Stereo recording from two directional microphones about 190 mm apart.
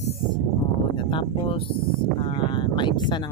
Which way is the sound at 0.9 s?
25° left (ahead or behind).